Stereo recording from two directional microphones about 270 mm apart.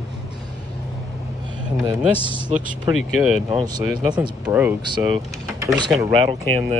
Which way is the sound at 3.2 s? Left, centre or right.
Centre.